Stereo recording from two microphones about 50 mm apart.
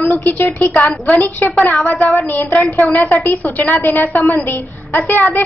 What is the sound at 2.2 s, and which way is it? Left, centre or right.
Speech, left.